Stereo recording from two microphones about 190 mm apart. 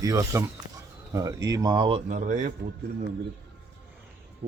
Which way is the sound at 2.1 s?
40° right (ahead or behind).